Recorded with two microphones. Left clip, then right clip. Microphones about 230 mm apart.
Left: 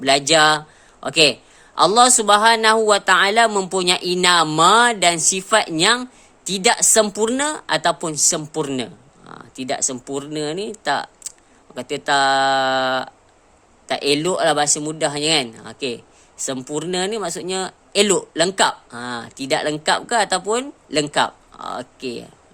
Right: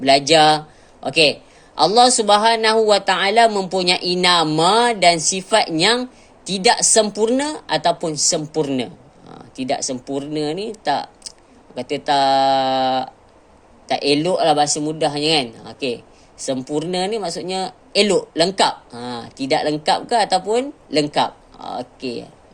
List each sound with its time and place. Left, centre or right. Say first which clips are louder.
0.0 s a man's voice: right 2 dB; left